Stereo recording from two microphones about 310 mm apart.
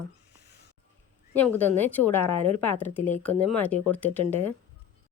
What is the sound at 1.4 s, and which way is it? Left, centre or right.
A woman's voice, centre.